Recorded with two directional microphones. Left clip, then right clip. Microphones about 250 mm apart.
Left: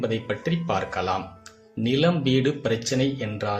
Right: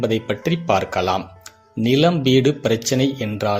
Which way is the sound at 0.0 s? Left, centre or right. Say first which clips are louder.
Right 6 dB; right.